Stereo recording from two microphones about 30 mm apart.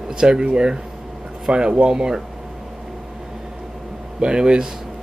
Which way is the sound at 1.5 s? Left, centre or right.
Right.